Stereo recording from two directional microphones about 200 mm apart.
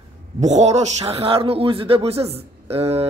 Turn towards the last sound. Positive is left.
turn(degrees=-30)  # may be behind; listen again after turning